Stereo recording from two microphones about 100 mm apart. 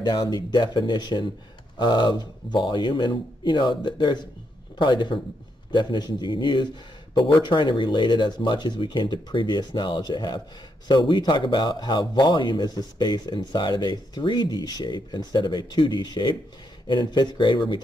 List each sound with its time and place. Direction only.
0.0 s speech: 45° left (ahead or behind)